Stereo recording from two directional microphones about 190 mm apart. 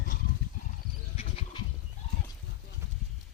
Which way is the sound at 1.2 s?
30° left (ahead or behind).